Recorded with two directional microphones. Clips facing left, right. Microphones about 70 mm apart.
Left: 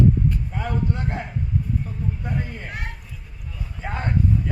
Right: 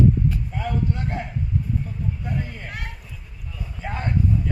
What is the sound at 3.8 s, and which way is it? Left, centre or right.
Speech, left.